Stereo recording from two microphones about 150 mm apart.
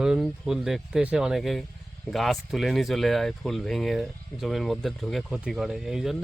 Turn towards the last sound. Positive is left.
turn(degrees=0)  # may be behind; listen again after turning